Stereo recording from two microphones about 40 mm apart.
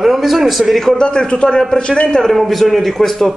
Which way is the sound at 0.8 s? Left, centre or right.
Centre.